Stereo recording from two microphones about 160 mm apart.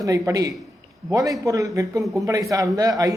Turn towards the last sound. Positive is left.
turn(degrees=-20)  # may be behind; listen again after turning